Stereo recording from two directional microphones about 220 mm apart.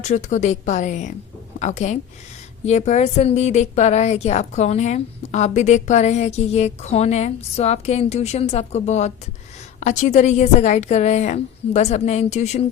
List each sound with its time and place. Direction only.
0.0 s a woman's voice: 30° left (ahead or behind)